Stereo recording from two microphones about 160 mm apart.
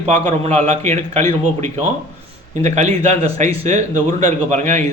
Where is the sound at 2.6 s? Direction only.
45° right (ahead or behind).